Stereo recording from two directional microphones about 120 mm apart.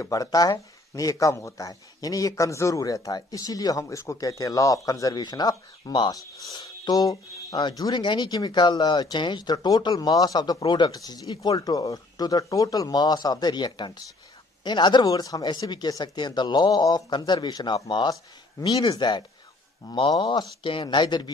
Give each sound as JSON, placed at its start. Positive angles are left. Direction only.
{"t": 0.0, "sound": "speech", "side_deg": 30}